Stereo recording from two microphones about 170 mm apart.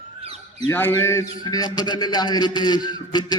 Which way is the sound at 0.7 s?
15° left (ahead or behind).